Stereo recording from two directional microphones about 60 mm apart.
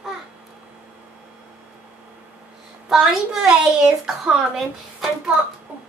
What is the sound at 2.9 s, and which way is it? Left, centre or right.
A woman's voice, centre.